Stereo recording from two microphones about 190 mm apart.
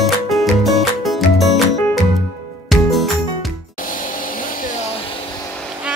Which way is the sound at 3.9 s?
45° left (ahead or behind).